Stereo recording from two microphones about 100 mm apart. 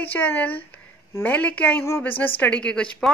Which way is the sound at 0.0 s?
15° left (ahead or behind).